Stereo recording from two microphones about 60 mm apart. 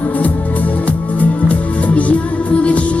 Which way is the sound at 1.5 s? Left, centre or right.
Left.